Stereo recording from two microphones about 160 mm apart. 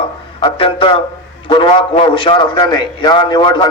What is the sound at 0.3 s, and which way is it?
A man's voice, 30° left (ahead or behind).